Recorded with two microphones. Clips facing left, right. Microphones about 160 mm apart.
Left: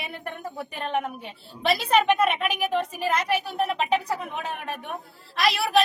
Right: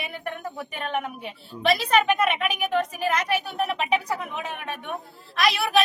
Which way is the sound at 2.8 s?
30° left (ahead or behind).